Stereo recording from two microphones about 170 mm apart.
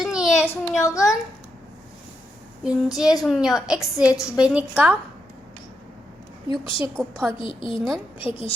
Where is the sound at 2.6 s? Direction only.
5° right (ahead or behind).